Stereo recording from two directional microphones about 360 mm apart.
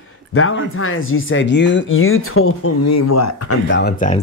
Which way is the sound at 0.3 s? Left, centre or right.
Left.